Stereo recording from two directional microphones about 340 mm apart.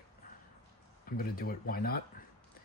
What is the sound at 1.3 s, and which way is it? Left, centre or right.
Speech, left.